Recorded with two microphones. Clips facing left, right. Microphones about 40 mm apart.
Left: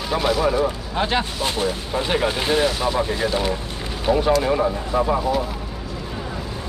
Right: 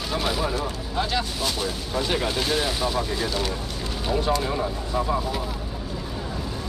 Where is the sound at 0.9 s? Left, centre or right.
Left.